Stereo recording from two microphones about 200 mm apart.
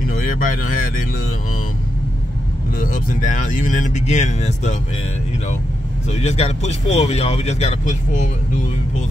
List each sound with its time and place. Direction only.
2.8 s speech: 40° left (ahead or behind)
6.0 s speech: 35° left (ahead or behind)